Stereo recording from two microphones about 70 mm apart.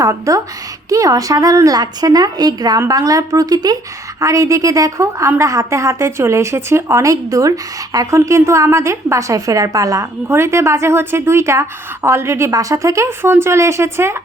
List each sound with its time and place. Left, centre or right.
0.0 s a woman's voice: right
4.2 s a woman's voice: right